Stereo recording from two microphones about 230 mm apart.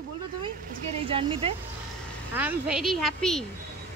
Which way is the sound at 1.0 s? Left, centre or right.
Right.